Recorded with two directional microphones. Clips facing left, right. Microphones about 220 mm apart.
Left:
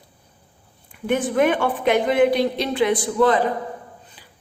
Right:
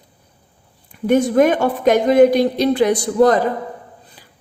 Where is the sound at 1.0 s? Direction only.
40° right (ahead or behind).